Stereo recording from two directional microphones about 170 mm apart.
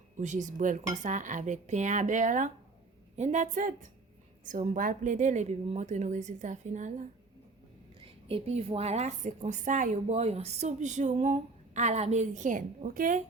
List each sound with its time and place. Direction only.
0.2 s a woman's voice: 45° right (ahead or behind)